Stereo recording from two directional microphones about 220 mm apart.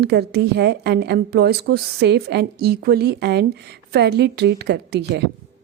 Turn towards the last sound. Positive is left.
turn(degrees=-50)  # may be behind; listen again after turning